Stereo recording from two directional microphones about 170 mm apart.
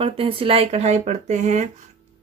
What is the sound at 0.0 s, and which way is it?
Speech, 35° right (ahead or behind).